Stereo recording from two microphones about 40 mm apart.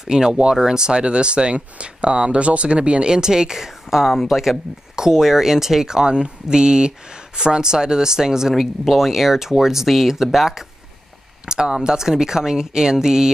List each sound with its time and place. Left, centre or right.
0.0 s speech: centre
11.4 s speech: centre